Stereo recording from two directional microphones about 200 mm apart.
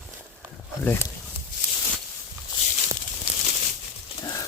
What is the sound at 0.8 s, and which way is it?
Speech, 10° left (ahead or behind).